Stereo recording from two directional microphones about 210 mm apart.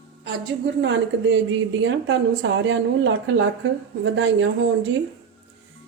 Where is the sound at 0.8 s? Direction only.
60° right (ahead or behind).